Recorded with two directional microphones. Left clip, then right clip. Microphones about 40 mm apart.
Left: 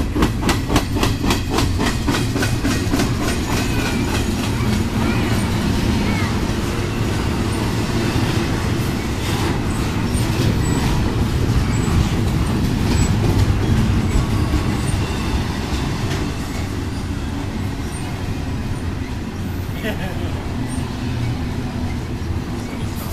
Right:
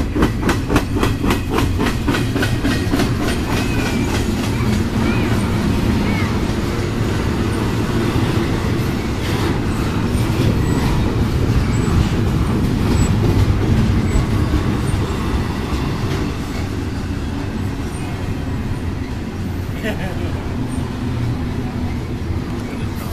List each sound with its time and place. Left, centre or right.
0.2 s train: left
3.8 s train: centre
6.0 s vehicle: left
7.8 s vehicle: left
10.3 s vehicle: left
11.8 s vehicle: left
12.8 s vehicle: left